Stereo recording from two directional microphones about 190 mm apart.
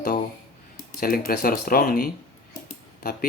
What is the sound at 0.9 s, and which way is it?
Speech, 50° left (ahead or behind).